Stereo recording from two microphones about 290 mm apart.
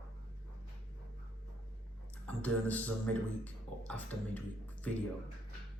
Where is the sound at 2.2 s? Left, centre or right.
Centre.